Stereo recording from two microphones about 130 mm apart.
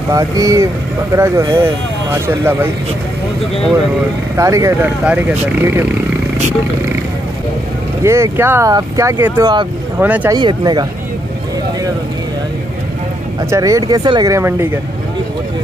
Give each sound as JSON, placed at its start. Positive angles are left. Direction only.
{"t": 0.1, "sound": "speech", "side_deg": -25}
{"t": 4.4, "sound": "speech", "side_deg": -25}
{"t": 5.0, "sound": "speech", "side_deg": -10}
{"t": 8.0, "sound": "speech", "side_deg": -20}
{"t": 9.9, "sound": "speech", "side_deg": -15}
{"t": 10.3, "sound": "speech", "side_deg": -30}
{"t": 13.5, "sound": "speech", "side_deg": -25}
{"t": 14.3, "sound": "speech", "side_deg": -20}